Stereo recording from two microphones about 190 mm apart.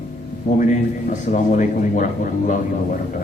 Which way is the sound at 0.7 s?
40° left (ahead or behind).